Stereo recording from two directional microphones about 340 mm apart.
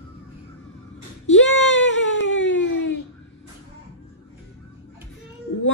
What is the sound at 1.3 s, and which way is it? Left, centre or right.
Baby cry, left.